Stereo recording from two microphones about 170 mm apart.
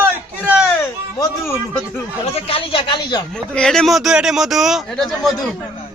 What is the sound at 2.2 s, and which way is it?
Speech, 35° left (ahead or behind).